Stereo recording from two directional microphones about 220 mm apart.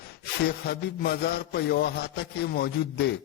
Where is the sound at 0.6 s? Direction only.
45° left (ahead or behind).